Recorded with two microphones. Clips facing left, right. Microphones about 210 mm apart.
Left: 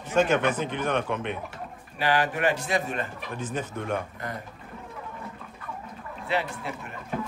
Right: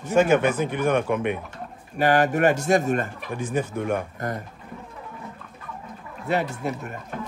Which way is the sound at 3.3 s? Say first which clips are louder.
Right 6 dB; 10° right (ahead or behind).